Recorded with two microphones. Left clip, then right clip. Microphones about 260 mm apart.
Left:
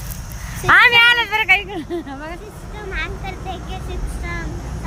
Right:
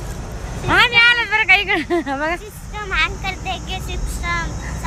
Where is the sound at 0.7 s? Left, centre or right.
Centre.